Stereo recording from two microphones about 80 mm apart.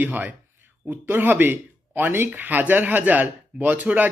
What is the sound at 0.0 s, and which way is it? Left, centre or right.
Speech, right.